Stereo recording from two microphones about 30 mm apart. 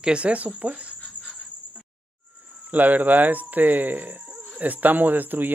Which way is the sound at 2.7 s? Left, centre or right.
Right.